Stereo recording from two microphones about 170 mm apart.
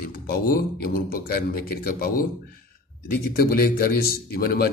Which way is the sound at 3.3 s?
60° left (ahead or behind).